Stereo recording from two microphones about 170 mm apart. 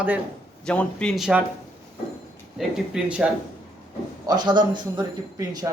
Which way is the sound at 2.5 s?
5° right (ahead or behind).